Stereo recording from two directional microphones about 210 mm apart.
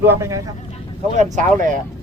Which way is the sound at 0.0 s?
10° right (ahead or behind).